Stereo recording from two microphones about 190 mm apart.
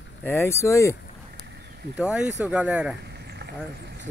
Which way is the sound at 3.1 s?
60° right (ahead or behind).